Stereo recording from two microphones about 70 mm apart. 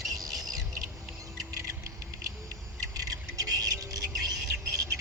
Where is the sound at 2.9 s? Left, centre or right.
Right.